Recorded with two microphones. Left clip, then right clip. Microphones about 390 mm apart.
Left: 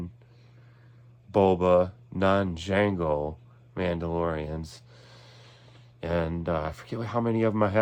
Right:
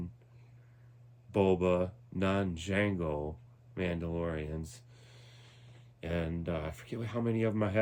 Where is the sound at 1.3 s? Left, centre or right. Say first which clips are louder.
Left 8 dB; centre.